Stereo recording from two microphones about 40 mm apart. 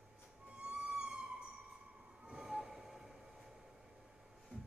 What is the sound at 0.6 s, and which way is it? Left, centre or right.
Music, right.